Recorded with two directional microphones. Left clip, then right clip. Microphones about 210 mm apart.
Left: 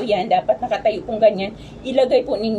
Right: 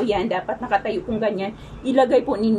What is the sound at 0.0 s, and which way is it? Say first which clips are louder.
A woman's voice: left 4 dB; 5° right (ahead or behind).